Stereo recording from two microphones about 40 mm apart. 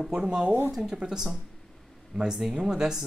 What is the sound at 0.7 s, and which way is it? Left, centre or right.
Speech, centre.